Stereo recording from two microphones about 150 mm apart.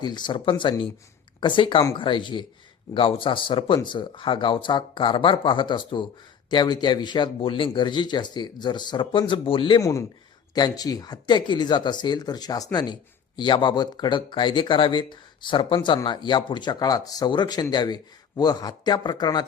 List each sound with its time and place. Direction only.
0.0 s a man's voice: 30° left (ahead or behind)
9.8 s speech: 20° left (ahead or behind)